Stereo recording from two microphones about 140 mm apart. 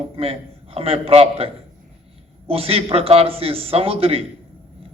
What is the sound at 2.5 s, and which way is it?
A man's voice, 45° right (ahead or behind).